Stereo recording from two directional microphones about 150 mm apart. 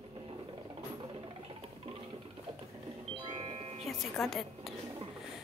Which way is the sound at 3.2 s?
40° right (ahead or behind).